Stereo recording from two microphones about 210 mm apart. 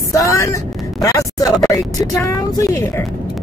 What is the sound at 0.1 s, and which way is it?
Speech, 15° left (ahead or behind).